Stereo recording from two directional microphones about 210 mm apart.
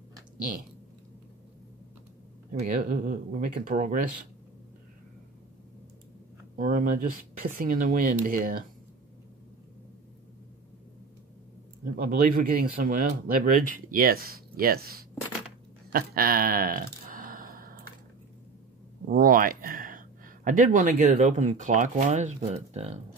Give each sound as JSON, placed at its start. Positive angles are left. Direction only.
{"t": 2.6, "sound": "speech", "side_deg": -40}
{"t": 6.6, "sound": "speech", "side_deg": -40}
{"t": 12.0, "sound": "speech", "side_deg": -45}
{"t": 15.9, "sound": "a sound", "side_deg": -45}
{"t": 19.0, "sound": "speech", "side_deg": -40}